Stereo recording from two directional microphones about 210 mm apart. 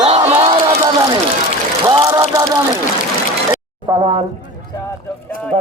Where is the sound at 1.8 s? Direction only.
15° right (ahead or behind).